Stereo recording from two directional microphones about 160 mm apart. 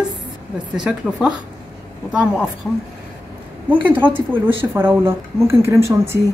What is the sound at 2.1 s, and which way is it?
Speech, 5° right (ahead or behind).